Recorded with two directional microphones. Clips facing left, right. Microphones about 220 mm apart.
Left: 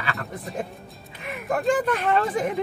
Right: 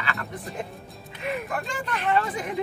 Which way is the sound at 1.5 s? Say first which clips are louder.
Left 9 dB; 50° left (ahead or behind).